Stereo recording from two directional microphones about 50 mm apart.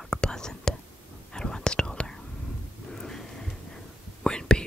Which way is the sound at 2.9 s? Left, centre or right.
Centre.